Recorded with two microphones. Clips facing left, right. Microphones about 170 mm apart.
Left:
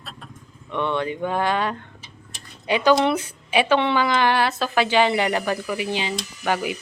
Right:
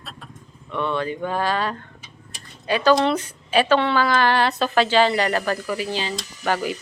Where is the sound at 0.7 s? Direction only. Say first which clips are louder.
Even; 15° left (ahead or behind).